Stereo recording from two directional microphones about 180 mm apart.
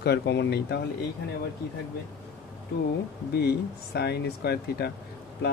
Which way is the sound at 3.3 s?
65° left (ahead or behind).